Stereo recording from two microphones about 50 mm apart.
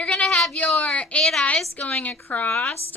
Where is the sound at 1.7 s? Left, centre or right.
Left.